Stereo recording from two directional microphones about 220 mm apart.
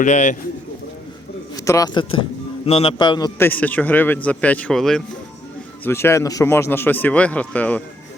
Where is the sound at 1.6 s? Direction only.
15° left (ahead or behind).